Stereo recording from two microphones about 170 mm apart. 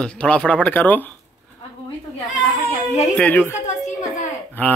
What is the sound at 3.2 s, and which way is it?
Speech, 10° left (ahead or behind).